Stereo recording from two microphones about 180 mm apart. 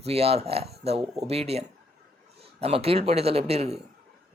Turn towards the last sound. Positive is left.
turn(degrees=-35)  # may be behind; listen again after turning